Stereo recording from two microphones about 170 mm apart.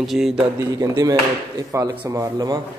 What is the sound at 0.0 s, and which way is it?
Speech, centre (ahead or behind).